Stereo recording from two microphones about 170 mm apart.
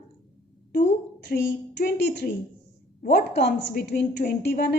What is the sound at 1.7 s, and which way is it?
A woman's voice, 80° left.